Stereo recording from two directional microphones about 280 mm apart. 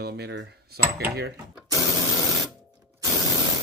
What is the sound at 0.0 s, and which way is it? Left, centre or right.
Speech, right.